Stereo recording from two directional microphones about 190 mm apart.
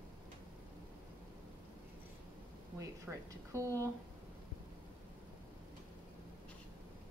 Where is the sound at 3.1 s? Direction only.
10° right (ahead or behind).